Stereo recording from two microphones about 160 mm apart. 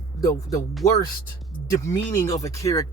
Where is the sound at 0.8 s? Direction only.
20° left (ahead or behind).